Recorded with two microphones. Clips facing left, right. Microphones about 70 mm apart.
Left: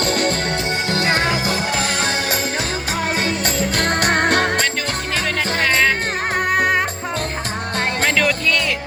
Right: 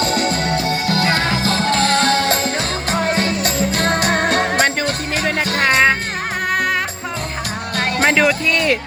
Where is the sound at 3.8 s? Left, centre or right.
Left.